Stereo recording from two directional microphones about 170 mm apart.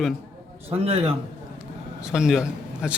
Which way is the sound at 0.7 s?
35° right (ahead or behind).